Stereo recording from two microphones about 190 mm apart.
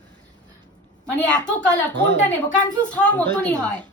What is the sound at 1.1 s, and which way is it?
Speech, 5° left (ahead or behind).